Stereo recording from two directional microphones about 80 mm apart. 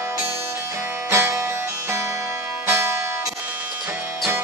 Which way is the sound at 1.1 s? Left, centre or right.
Right.